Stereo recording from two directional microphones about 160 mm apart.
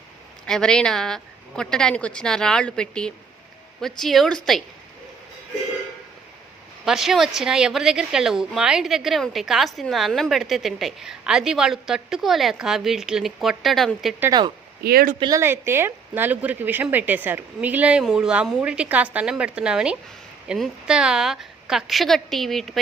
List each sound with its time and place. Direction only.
0.4 s a woman's voice: 5° left (ahead or behind)
6.8 s a woman's voice: centre (ahead or behind)
14.8 s speech: 70° right (ahead or behind)
15.2 s a woman's voice: 20° right (ahead or behind); by 22.8 s centre (ahead or behind)